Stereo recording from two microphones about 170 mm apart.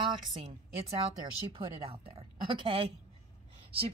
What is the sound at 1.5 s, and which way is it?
Speech, 35° right (ahead or behind).